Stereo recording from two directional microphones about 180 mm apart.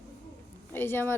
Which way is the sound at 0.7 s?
10° left (ahead or behind).